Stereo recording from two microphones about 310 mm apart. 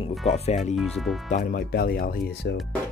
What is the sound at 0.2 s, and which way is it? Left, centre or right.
Speech, left.